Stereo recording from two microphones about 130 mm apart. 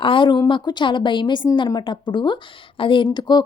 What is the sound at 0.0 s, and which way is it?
A woman's voice, 40° left (ahead or behind).